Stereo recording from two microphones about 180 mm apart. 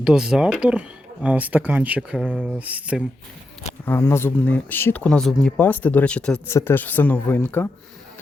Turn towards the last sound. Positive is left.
turn(degrees=10)  # may be behind; listen again after turning